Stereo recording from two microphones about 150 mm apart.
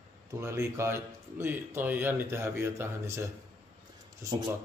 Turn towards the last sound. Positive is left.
turn(degrees=-20)  # may be behind; listen again after turning